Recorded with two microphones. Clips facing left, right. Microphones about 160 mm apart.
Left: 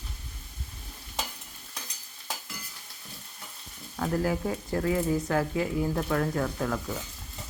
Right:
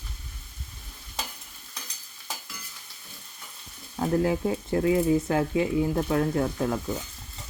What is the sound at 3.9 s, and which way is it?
Speech, 25° right (ahead or behind).